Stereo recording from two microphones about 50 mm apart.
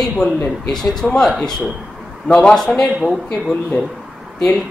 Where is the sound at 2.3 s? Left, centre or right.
Centre.